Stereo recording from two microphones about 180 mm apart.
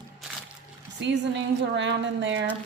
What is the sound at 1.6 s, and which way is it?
Speech, 80° right.